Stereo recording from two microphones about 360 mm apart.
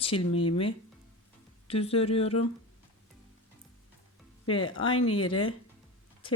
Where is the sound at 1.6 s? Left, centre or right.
Centre.